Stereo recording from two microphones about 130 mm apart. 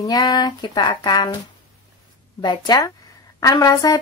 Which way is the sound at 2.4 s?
35° left (ahead or behind).